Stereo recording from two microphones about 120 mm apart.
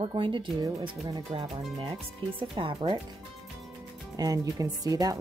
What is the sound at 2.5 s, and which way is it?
Speech, 45° right (ahead or behind).